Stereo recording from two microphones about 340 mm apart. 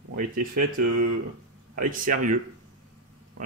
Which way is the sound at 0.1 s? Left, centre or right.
Right.